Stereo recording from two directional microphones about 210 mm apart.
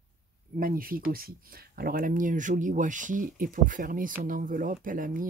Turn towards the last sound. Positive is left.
turn(degrees=-40)  # may be behind; listen again after turning